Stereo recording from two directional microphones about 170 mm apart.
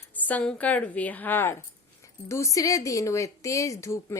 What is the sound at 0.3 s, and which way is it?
A woman's voice, 10° left (ahead or behind).